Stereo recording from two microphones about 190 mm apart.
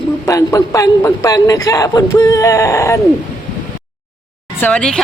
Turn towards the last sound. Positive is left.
turn(degrees=5)  # may be behind; listen again after turning